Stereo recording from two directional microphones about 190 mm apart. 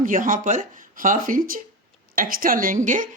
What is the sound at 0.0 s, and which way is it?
Speech, 45° right (ahead or behind).